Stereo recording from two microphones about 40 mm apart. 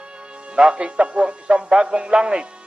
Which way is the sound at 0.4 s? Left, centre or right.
Right.